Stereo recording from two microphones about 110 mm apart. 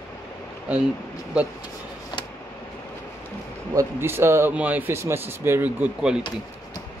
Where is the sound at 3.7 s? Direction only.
25° right (ahead or behind).